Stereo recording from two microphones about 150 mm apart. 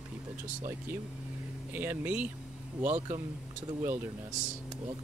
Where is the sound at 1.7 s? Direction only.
15° right (ahead or behind).